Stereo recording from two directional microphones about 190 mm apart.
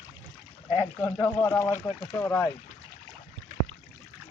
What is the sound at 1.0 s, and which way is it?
Speech, 15° left (ahead or behind).